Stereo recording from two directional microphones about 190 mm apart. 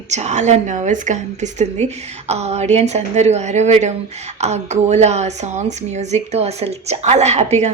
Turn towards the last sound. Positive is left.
turn(degrees=-35)  # may be behind; listen again after turning